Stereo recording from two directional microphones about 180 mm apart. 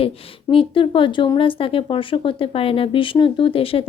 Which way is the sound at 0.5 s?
30° left (ahead or behind).